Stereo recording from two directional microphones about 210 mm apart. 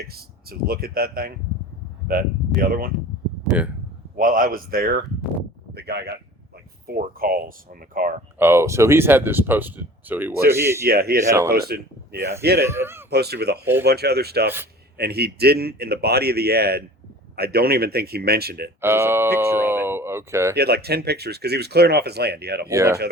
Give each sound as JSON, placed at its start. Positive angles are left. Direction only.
{"t": 0.7, "sound": "speech", "side_deg": -45}
{"t": 2.6, "sound": "speech", "side_deg": -45}
{"t": 3.5, "sound": "speech", "side_deg": -5}
{"t": 4.2, "sound": "a man's voice", "side_deg": -40}
{"t": 8.4, "sound": "speech", "side_deg": -10}
{"t": 10.8, "sound": "speech", "side_deg": -45}
{"t": 11.3, "sound": "speech", "side_deg": -15}
{"t": 12.4, "sound": "speech", "side_deg": -50}
{"t": 12.6, "sound": "speech", "side_deg": -10}
{"t": 13.1, "sound": "speech", "side_deg": -50}
{"t": 18.8, "sound": "speech", "side_deg": -10}
{"t": 20.6, "sound": "speech", "side_deg": -50}
{"t": 22.7, "sound": "speech", "side_deg": -15}